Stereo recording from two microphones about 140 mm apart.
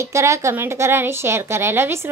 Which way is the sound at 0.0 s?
20° right (ahead or behind).